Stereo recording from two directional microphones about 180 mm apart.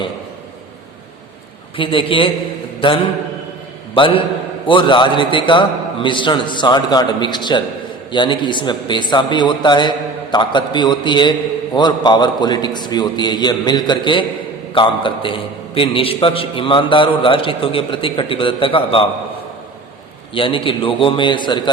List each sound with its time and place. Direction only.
1.7 s a man's voice: 30° left (ahead or behind)
20.3 s a man's voice: 30° left (ahead or behind)